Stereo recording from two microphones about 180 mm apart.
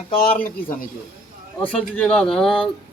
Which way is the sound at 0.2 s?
50° left (ahead or behind).